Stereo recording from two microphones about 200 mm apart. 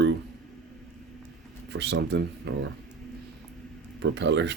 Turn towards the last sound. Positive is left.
turn(degrees=-60)  # may be behind; listen again after turning